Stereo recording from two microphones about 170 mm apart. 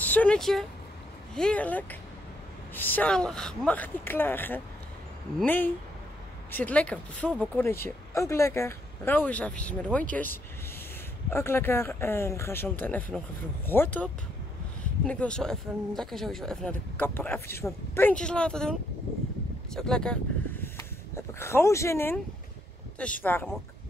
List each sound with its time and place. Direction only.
0.0 s speech: 10° left (ahead or behind)
20.6 s speech: 15° left (ahead or behind)
23.2 s speech: 10° left (ahead or behind)